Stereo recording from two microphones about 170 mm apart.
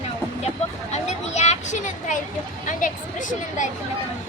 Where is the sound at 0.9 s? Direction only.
40° left (ahead or behind).